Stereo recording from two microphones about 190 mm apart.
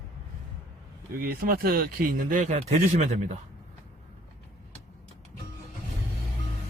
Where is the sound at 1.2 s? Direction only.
50° right (ahead or behind); by 3.3 s 35° right (ahead or behind).